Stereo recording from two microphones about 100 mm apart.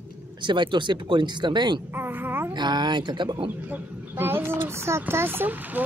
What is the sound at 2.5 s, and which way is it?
Speech, 45° right (ahead or behind).